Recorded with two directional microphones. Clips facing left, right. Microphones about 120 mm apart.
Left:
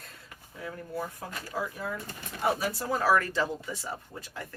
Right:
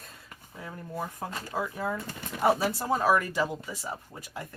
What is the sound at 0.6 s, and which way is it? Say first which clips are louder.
Speech: left 1 dB; 25° right (ahead or behind).